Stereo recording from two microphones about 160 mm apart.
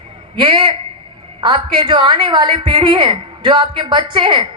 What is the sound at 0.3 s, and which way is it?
A man's voice, 30° right (ahead or behind).